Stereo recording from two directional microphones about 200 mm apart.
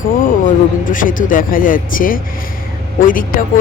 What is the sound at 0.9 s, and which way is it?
Speech, 40° left (ahead or behind).